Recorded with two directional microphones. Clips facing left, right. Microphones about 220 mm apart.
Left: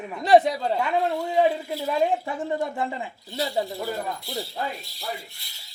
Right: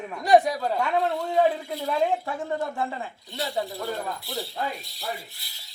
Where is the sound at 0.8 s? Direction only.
Centre (ahead or behind).